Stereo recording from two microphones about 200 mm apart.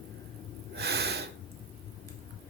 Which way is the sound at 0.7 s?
55° right (ahead or behind).